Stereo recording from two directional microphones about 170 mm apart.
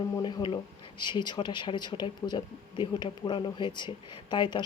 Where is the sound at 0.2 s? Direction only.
25° left (ahead or behind).